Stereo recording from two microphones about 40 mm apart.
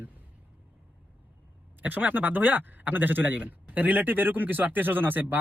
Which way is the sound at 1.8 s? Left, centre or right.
Right.